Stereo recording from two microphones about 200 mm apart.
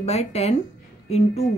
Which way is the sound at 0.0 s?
30° left (ahead or behind).